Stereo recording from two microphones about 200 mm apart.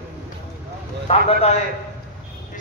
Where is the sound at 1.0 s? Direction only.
30° left (ahead or behind).